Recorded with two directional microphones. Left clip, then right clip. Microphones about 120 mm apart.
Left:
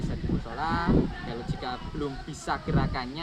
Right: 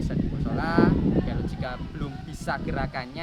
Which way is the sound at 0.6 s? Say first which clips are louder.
Right 6 dB; 50° right (ahead or behind).